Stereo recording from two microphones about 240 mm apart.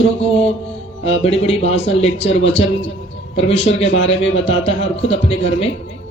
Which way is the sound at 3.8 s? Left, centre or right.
Left.